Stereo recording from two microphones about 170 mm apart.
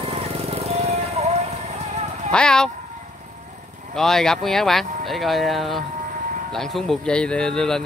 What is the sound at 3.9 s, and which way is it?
Speech, 5° left (ahead or behind).